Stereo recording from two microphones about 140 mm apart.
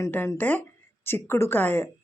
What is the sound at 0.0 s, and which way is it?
Speech, 20° left (ahead or behind).